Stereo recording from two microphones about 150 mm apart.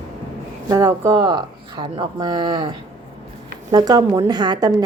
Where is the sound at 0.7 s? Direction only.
25° right (ahead or behind).